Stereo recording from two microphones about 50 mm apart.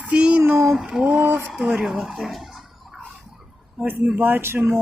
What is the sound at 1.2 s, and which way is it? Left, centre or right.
Speech, right.